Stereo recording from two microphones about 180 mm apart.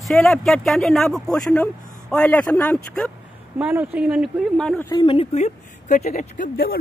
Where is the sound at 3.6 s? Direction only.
10° right (ahead or behind).